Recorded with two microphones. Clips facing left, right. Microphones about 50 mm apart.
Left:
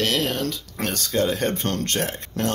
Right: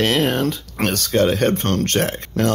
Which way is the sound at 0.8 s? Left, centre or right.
Right.